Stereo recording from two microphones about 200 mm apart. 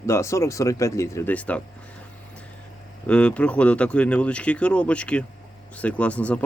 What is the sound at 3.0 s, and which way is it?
Speech, 5° left (ahead or behind).